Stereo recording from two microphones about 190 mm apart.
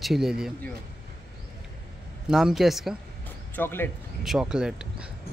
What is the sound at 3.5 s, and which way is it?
Speech, 10° left (ahead or behind).